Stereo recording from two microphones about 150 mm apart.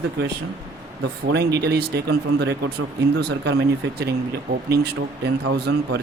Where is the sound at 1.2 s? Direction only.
90° right.